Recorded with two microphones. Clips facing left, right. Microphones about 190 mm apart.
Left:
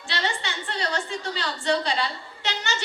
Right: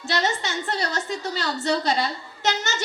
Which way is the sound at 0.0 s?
40° right (ahead or behind).